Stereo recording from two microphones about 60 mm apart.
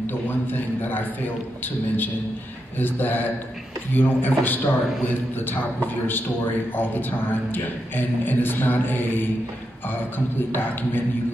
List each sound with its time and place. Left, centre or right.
0.5 s a man's voice: left
2.8 s a man's voice: left